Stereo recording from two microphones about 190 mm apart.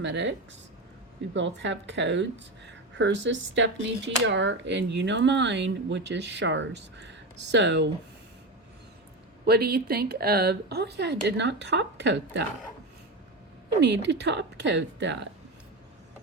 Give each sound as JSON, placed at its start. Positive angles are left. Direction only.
{"t": 0.0, "sound": "speech", "side_deg": -70}
{"t": 9.5, "sound": "speech", "side_deg": -55}
{"t": 13.8, "sound": "speech", "side_deg": -65}